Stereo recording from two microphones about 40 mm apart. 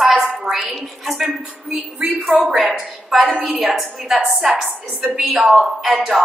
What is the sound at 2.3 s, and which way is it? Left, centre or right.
Speech, right.